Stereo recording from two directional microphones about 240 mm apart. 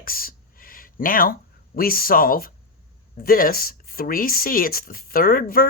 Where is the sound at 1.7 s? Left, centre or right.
Left.